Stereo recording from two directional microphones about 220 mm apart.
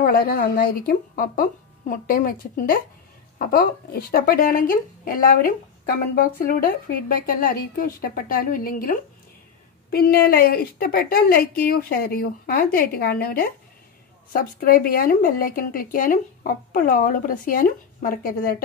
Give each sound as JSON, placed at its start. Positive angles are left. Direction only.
{"t": 0.0, "sound": "a woman's voice", "side_deg": 40}